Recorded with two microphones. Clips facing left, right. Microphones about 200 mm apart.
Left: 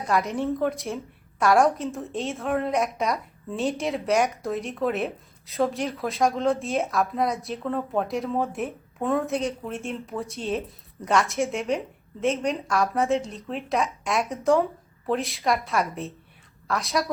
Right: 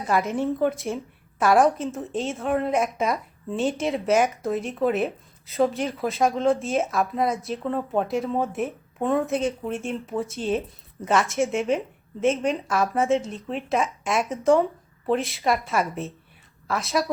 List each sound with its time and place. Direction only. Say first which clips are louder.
0.1 s a woman's voice: right 1 dB; centre (ahead or behind)